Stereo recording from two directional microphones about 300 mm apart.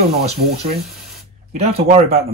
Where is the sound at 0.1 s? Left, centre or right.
Right.